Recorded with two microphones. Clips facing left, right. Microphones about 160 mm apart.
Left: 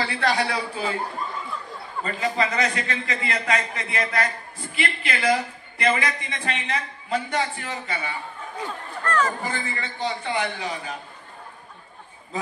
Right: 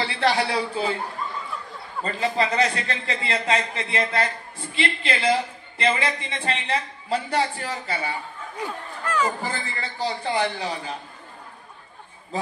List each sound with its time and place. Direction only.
0.0 s a man's voice: 25° right (ahead or behind)
2.0 s a man's voice: 30° right (ahead or behind)
8.6 s speech: 10° right (ahead or behind)
9.4 s a man's voice: 35° right (ahead or behind)